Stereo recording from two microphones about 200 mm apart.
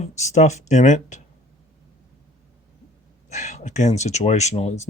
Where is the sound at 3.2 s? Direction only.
35° left (ahead or behind).